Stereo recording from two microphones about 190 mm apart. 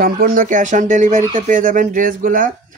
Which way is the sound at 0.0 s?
50° right (ahead or behind).